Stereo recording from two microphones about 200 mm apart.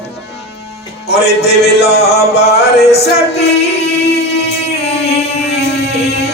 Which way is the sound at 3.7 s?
55° left (ahead or behind).